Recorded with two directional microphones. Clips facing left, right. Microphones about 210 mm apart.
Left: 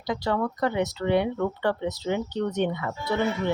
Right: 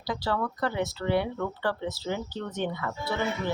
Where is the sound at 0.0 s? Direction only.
20° left (ahead or behind).